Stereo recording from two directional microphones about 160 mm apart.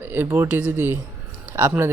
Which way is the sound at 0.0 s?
15° right (ahead or behind).